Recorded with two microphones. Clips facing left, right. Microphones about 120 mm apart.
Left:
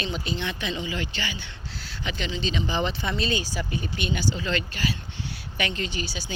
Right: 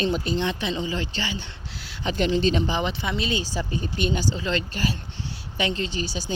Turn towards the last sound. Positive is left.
turn(degrees=-40)  # may be behind; listen again after turning